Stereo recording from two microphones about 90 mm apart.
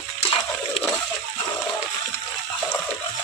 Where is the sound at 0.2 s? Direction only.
90° left.